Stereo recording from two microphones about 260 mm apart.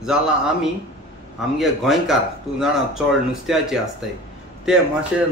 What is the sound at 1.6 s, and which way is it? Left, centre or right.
A man's voice, centre.